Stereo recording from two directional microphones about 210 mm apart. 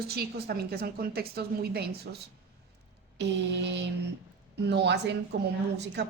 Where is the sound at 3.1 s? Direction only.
55° right (ahead or behind).